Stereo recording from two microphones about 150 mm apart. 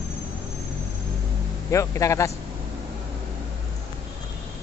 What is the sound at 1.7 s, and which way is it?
Speech, 20° left (ahead or behind).